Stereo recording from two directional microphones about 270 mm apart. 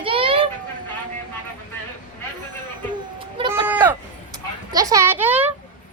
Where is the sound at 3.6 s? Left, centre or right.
Centre.